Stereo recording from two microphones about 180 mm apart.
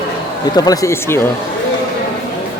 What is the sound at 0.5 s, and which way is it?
Speech, 20° left (ahead or behind).